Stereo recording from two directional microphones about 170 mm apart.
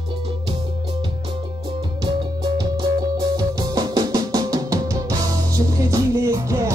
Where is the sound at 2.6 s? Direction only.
25° right (ahead or behind).